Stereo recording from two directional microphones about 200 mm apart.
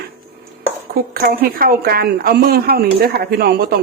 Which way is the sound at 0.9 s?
45° right (ahead or behind).